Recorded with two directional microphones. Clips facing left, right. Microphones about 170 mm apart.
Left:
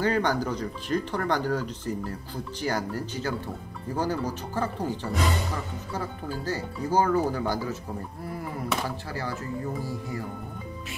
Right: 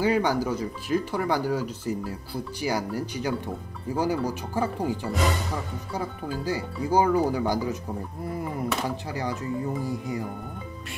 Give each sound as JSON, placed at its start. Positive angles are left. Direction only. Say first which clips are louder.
{"t": 0.0, "sound": "speech", "louder": "right 2 dB", "side_deg": -10}
{"t": 8.8, "sound": "speech", "louder": "right 3 dB", "side_deg": -15}